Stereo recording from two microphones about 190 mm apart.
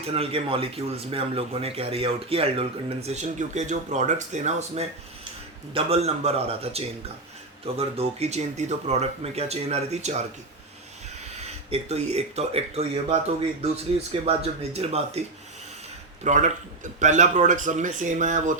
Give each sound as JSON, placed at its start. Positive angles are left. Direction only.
{"t": 0.0, "sound": "speech", "side_deg": -30}
{"t": 11.3, "sound": "speech", "side_deg": -35}
{"t": 16.2, "sound": "speech", "side_deg": -40}